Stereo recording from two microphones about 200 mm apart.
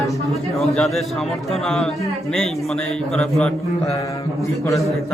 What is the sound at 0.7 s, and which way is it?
Speech, centre (ahead or behind).